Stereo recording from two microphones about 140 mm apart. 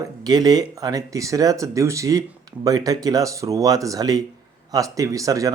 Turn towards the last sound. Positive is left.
turn(degrees=-25)  # may be behind; listen again after turning